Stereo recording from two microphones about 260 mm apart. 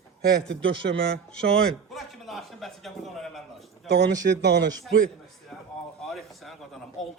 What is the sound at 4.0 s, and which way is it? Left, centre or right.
Speech, right.